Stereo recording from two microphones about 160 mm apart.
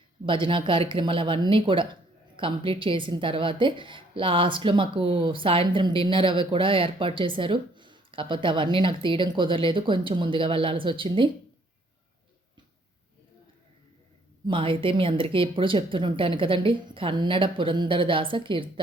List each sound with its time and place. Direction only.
0.3 s speech: 30° right (ahead or behind)
14.4 s speech: 30° right (ahead or behind)